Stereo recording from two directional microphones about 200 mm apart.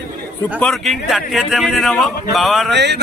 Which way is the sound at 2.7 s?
60° right (ahead or behind).